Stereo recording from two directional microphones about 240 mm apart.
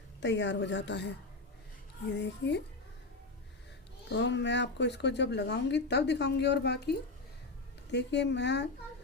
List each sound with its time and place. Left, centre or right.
0.2 s speech: left
4.1 s speech: left